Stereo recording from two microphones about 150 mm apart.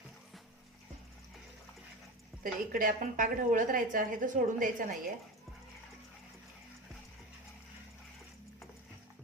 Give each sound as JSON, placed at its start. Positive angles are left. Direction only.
{"t": 2.4, "sound": "a woman's voice", "side_deg": -65}